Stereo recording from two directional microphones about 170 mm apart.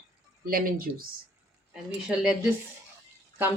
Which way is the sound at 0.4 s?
60° right (ahead or behind).